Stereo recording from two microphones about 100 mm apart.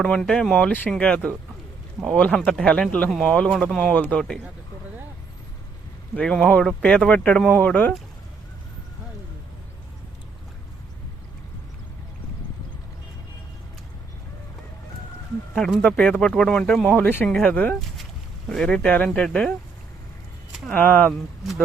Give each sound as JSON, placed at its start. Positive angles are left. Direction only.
{"t": 0.0, "sound": "speech", "side_deg": 5}
{"t": 6.1, "sound": "speech", "side_deg": 10}
{"t": 15.5, "sound": "speech", "side_deg": 5}
{"t": 20.7, "sound": "speech", "side_deg": 15}